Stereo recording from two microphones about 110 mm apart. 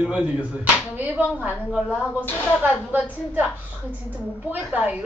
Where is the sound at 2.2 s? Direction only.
20° left (ahead or behind).